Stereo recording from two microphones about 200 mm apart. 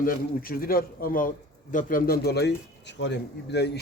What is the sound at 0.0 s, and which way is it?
A man's voice, 45° left (ahead or behind).